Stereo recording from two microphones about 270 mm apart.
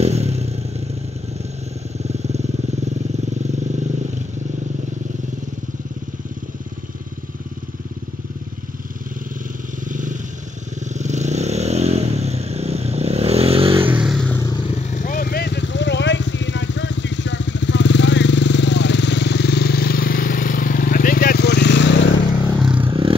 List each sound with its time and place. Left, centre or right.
0.0 s vehicle: right
2.0 s vehicle: right
9.8 s vehicle: right
13.8 s vehicle: centre
14.8 s vehicle: left
22.8 s clatter: centre